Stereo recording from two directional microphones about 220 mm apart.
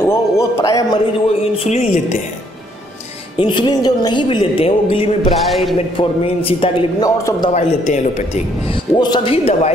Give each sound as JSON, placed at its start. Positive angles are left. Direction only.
{"t": 0.0, "sound": "a man's voice", "side_deg": 10}
{"t": 1.4, "sound": "a woman's voice", "side_deg": 30}
{"t": 3.3, "sound": "a woman's voice", "side_deg": 20}
{"t": 5.5, "sound": "a man's voice", "side_deg": 0}
{"t": 5.9, "sound": "a woman's voice", "side_deg": 25}
{"t": 7.5, "sound": "a man's voice", "side_deg": 30}
{"t": 8.9, "sound": "a woman's voice", "side_deg": 20}